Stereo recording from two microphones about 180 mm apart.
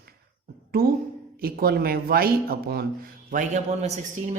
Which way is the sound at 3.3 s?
45° right (ahead or behind).